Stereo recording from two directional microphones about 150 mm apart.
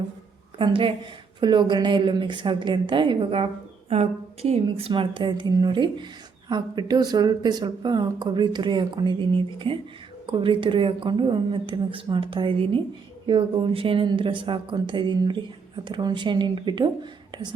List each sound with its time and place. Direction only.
0.6 s a woman's voice: 35° right (ahead or behind)
4.6 s a woman's voice: 30° right (ahead or behind)